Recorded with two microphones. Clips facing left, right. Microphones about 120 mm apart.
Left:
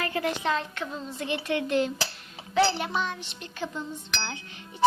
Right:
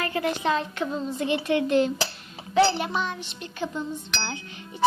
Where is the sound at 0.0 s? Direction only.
15° right (ahead or behind).